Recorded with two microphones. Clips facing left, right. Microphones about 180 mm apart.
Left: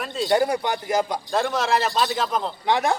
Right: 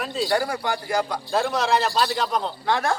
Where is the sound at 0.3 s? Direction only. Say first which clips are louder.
Left 6 dB; 20° left (ahead or behind).